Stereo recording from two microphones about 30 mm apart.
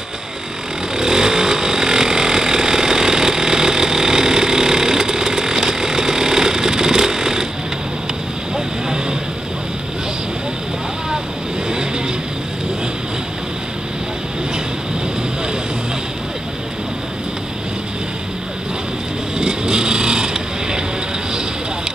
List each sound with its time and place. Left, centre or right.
0.9 s vehicle: right
19.3 s vehicle: right